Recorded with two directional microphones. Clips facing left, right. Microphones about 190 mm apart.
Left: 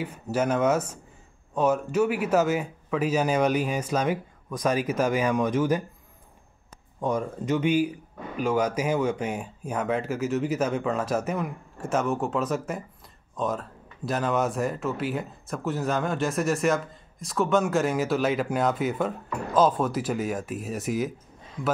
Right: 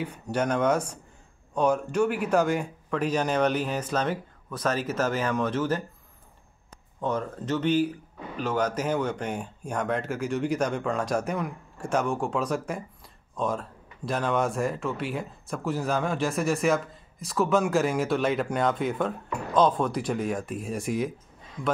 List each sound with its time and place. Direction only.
0.0 s a man's voice: 5° left (ahead or behind)
7.0 s a man's voice: 10° left (ahead or behind)